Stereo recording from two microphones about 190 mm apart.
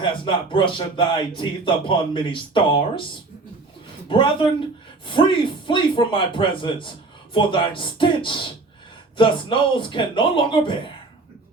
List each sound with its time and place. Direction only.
0.0 s speech: 25° left (ahead or behind)
4.1 s speech: 25° left (ahead or behind)